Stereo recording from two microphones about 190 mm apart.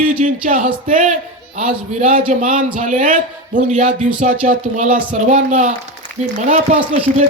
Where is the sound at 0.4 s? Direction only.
45° right (ahead or behind).